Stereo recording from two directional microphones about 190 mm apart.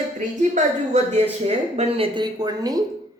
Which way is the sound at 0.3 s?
40° right (ahead or behind).